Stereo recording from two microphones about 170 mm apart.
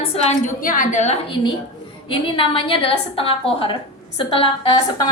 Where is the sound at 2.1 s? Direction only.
30° left (ahead or behind).